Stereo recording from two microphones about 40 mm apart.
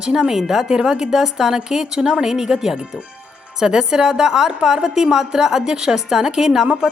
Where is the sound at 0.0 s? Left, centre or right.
Centre.